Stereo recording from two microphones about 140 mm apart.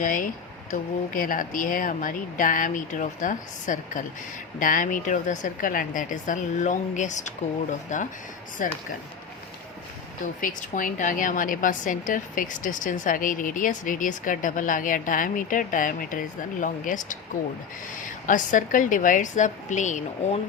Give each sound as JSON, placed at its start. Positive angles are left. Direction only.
{"t": 0.0, "sound": "a woman's voice", "side_deg": 70}
{"t": 10.4, "sound": "a woman's voice", "side_deg": 70}